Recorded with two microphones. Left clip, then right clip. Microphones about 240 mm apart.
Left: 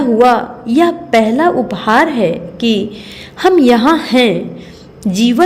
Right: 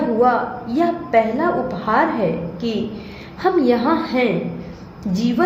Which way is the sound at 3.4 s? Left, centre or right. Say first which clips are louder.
Left 7 dB; left.